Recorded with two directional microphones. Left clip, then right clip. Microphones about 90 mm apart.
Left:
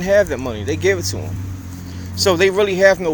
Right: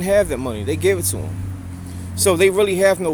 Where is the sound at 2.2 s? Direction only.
40° right (ahead or behind).